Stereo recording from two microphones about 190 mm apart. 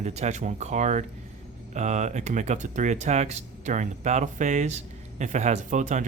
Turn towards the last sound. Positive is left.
turn(degrees=-40)  # may be behind; listen again after turning